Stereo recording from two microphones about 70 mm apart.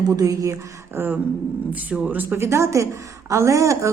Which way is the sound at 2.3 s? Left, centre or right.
Right.